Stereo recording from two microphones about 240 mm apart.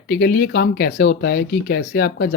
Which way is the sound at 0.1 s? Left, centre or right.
Left.